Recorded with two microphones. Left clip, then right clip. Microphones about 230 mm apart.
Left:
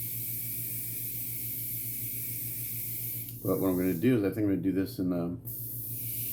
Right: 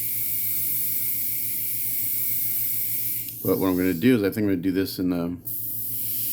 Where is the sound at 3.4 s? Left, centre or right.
Right.